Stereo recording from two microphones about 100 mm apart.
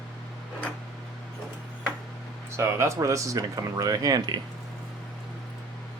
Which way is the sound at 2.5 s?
30° right (ahead or behind).